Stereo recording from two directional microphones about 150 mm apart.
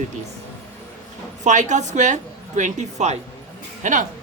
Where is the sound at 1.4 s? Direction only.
55° right (ahead or behind).